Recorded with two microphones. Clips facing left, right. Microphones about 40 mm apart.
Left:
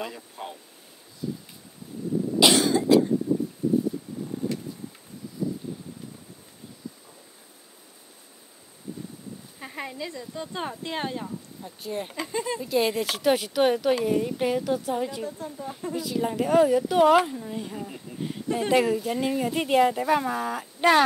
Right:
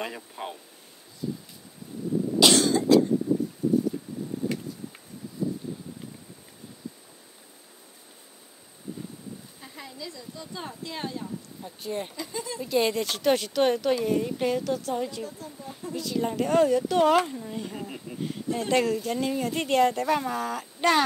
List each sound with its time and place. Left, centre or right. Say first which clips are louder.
0.0 s speech: right 1 dB; centre
2.4 s cough: left 1 dB; centre
9.6 s speech: left 11 dB; left
11.6 s speech: even; centre
12.3 s speech: left 6 dB; left
12.5 s speech: right 1 dB; centre
15.2 s speech: left 5 dB; left
15.9 s speech: even; centre
18.1 s speech: right 1 dB; right
18.5 s speech: left 2 dB; centre